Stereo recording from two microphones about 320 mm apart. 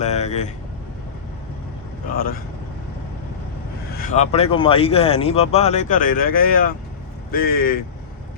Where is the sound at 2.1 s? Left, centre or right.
Left.